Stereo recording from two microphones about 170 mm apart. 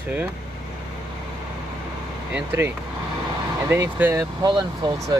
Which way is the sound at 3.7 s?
15° right (ahead or behind).